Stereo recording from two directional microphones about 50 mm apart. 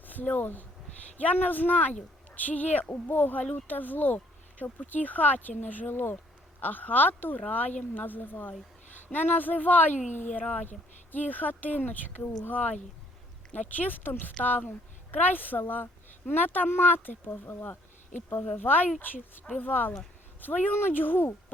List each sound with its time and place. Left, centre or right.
0.0 s speech: left
5.9 s speech: left
6.6 s speech: left
18.4 s speech: left